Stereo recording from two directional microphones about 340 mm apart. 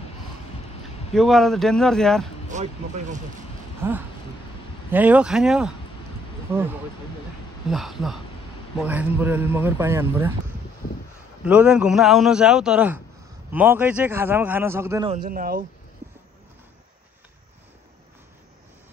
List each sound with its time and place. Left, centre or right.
1.1 s speech: centre
2.5 s speech: right
3.8 s speech: centre
7.7 s speech: centre
11.4 s speech: centre
15.2 s speech: right